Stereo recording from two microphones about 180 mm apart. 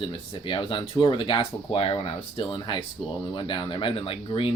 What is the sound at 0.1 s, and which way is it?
Speech, 30° left (ahead or behind).